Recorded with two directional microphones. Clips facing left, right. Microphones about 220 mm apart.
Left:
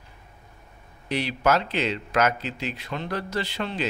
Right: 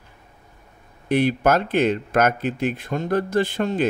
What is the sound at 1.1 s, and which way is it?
Speech, 50° right (ahead or behind).